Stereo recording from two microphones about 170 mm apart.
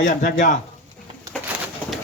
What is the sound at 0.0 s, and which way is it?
Speech, 50° left (ahead or behind).